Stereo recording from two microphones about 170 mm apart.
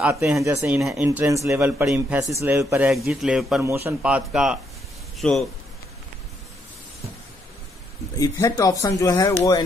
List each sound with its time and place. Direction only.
0.0 s speech: 10° right (ahead or behind)
2.9 s a man's voice: centre (ahead or behind)
3.6 s a man's voice: 15° right (ahead or behind); by 5.4 s 5° left (ahead or behind)
8.2 s speech: 20° left (ahead or behind)